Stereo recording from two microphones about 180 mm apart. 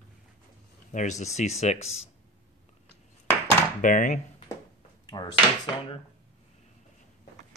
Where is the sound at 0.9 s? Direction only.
40° left (ahead or behind).